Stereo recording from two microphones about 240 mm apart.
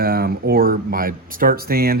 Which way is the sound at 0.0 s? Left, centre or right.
Right.